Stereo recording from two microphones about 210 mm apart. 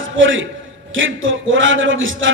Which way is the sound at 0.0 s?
65° right (ahead or behind).